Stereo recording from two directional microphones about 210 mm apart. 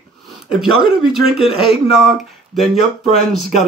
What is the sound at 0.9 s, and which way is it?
Speech, 5° right (ahead or behind).